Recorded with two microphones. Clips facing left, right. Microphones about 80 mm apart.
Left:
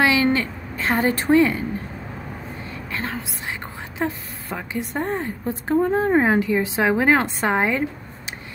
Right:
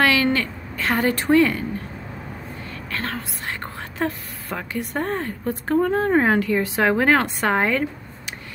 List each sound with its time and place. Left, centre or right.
0.0 s a woman's voice: left
2.9 s a woman's voice: centre